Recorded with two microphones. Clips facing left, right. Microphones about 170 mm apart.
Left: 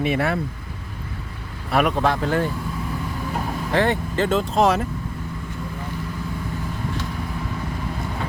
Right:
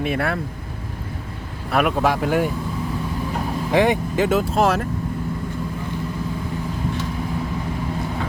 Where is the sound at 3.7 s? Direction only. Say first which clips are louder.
Right 3 dB; 15° right (ahead or behind).